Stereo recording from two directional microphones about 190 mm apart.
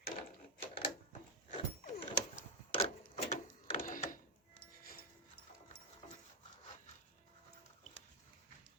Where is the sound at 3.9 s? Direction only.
45° left (ahead or behind).